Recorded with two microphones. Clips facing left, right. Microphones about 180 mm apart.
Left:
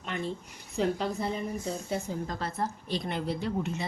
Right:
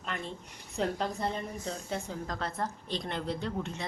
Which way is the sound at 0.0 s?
Centre (ahead or behind).